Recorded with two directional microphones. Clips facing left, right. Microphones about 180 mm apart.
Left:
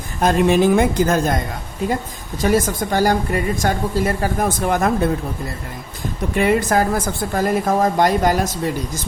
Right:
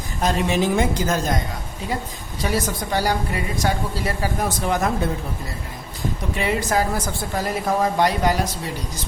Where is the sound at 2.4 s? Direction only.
50° left (ahead or behind).